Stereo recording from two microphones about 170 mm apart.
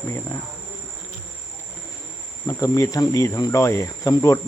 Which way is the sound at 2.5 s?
20° left (ahead or behind).